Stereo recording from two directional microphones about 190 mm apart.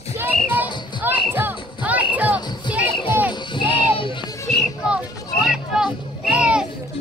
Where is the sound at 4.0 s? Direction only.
25° left (ahead or behind).